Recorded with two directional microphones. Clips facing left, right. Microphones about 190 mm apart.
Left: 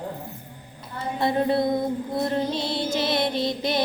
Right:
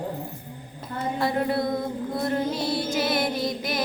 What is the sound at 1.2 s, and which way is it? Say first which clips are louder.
Music: left 3 dB; 25° left (ahead or behind).